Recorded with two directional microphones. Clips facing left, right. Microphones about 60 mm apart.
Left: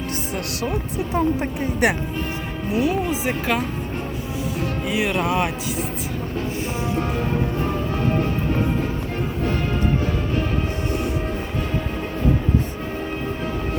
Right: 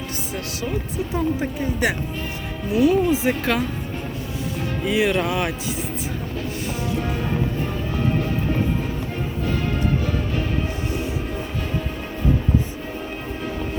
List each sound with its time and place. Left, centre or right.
1.1 s speech: left
2.7 s speech: left
4.9 s speech: centre